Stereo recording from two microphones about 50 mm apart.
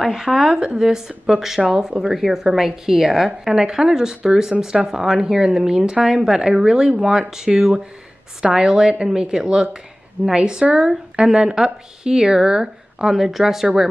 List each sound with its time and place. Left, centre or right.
0.0 s a woman's voice: centre